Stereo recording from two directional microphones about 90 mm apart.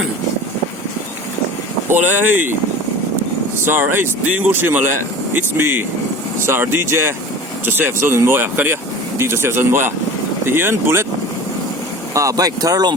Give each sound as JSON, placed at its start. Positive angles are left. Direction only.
{"t": 1.9, "sound": "speech", "side_deg": -20}
{"t": 3.6, "sound": "speech", "side_deg": -25}
{"t": 12.1, "sound": "speech", "side_deg": -40}